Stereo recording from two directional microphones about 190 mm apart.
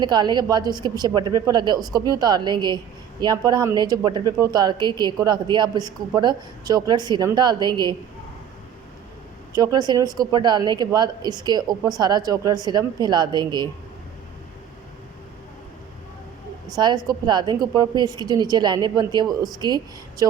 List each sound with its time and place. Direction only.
0.0 s a woman's voice: 20° right (ahead or behind)
9.5 s a woman's voice: 20° right (ahead or behind)
16.7 s a woman's voice: 20° right (ahead or behind)
19.2 s speech: centre (ahead or behind)
19.5 s a woman's voice: 20° right (ahead or behind)